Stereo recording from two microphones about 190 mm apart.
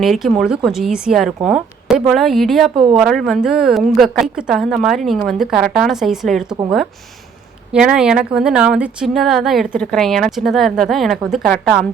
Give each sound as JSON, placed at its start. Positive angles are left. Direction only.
{"t": 0.0, "sound": "a woman's voice", "side_deg": 0}
{"t": 2.7, "sound": "a woman's voice", "side_deg": -25}
{"t": 3.0, "sound": "a woman's voice", "side_deg": 0}
{"t": 7.7, "sound": "a woman's voice", "side_deg": -5}